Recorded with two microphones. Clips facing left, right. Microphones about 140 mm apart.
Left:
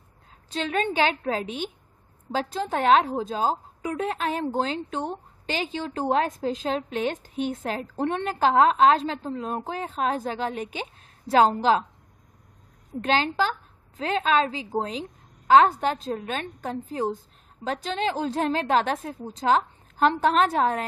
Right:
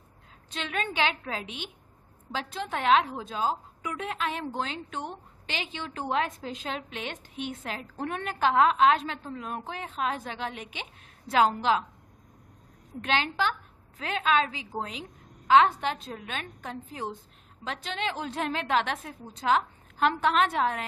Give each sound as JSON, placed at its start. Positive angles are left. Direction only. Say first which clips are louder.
{"t": 0.5, "sound": "a woman's voice", "louder": "left 7 dB", "side_deg": 35}
{"t": 8.0, "sound": "a woman's voice", "louder": "left 4 dB", "side_deg": 30}
{"t": 13.0, "sound": "a woman's voice", "louder": "left 4 dB", "side_deg": 35}